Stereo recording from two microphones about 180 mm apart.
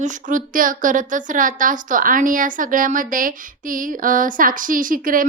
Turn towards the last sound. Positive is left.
turn(degrees=-50)  # may be behind; listen again after turning